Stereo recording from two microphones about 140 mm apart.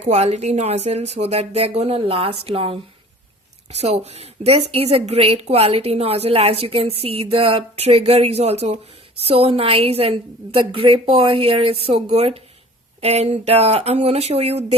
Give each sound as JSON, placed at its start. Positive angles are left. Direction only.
{"t": 0.0, "sound": "a woman's voice", "side_deg": -50}